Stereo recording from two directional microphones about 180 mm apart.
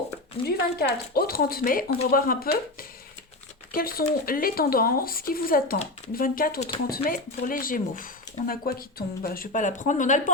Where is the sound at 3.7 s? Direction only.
55° left (ahead or behind).